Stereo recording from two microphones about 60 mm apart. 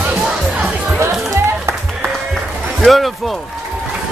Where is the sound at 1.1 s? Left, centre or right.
Centre.